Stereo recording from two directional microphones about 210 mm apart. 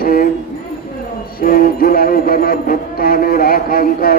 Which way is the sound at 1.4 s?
45° left (ahead or behind).